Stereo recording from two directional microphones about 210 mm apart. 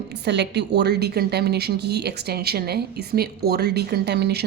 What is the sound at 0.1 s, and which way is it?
A woman's voice, 55° right (ahead or behind).